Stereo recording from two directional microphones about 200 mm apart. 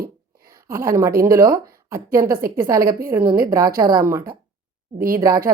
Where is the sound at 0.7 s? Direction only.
15° right (ahead or behind).